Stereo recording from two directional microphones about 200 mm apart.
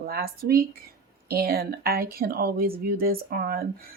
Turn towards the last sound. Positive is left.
turn(degrees=-45)  # may be behind; listen again after turning